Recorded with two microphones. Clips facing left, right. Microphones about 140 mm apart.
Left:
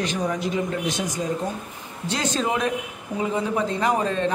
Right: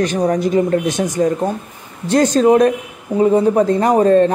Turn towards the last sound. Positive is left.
turn(degrees=-45)  # may be behind; listen again after turning